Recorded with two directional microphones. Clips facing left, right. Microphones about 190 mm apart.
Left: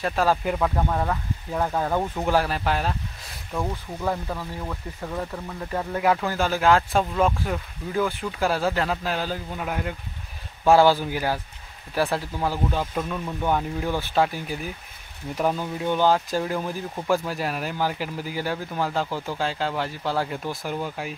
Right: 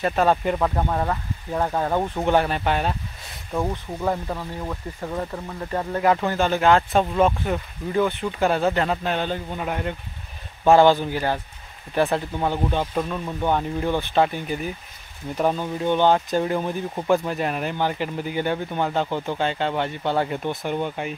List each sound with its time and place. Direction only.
0.0 s speech: centre (ahead or behind)
2.2 s speech: centre (ahead or behind)
3.5 s speech: 10° right (ahead or behind)
5.7 s speech: 5° left (ahead or behind)
15.8 s speech: 5° left (ahead or behind)
19.0 s speech: 20° right (ahead or behind)
19.3 s speech: centre (ahead or behind)